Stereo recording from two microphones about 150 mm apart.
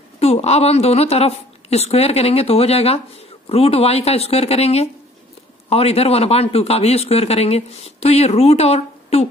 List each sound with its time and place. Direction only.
0.2 s speech: 45° left (ahead or behind)